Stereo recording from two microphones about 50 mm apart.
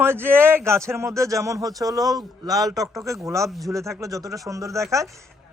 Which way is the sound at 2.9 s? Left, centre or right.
Right.